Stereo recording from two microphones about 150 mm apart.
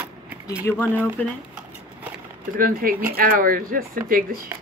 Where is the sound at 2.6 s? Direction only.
70° right (ahead or behind).